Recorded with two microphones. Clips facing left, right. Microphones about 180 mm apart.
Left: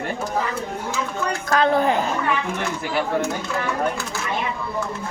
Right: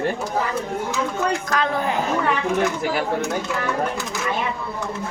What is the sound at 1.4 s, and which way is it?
Speech, 30° left (ahead or behind).